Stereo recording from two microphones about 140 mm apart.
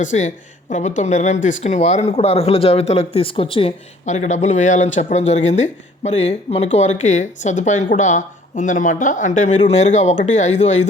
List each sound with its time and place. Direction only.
0.0 s speech: 60° left (ahead or behind); by 3.7 s 40° left (ahead or behind)
4.0 s speech: 60° left (ahead or behind)